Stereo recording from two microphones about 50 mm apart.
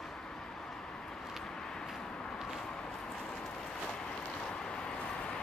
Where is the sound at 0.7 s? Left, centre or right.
Centre.